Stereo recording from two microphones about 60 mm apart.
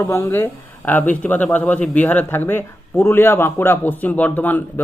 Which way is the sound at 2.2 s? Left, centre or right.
Left.